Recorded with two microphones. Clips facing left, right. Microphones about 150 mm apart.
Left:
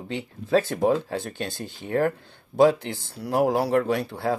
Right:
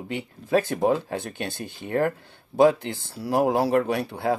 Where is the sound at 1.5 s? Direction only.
60° right (ahead or behind).